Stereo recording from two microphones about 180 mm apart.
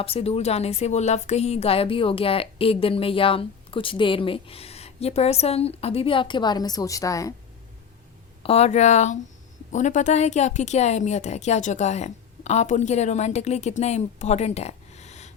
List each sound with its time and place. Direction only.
0.0 s a woman's voice: 35° left (ahead or behind)
8.4 s a woman's voice: 35° left (ahead or behind)